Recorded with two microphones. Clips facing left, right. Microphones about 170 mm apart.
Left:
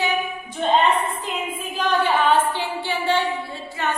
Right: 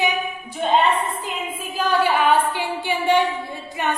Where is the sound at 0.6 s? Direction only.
10° right (ahead or behind).